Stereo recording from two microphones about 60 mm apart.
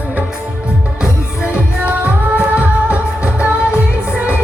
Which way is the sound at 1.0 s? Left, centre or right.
Centre.